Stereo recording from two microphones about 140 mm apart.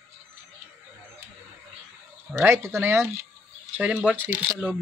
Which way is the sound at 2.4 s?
15° right (ahead or behind).